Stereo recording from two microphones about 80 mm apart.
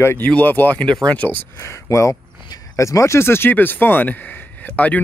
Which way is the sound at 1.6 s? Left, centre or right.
Left.